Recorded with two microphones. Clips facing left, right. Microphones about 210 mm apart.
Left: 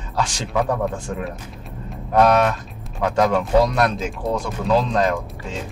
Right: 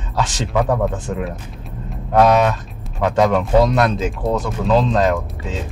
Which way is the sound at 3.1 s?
Centre (ahead or behind).